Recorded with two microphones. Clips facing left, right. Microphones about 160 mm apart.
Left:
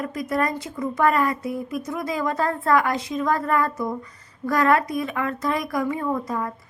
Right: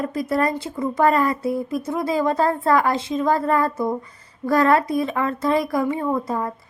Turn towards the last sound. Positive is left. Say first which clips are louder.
# right 3 dB
turn(degrees=-30)  # may be behind; listen again after turning